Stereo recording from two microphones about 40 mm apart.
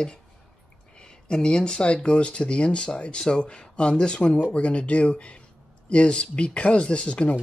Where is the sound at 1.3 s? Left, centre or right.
Left.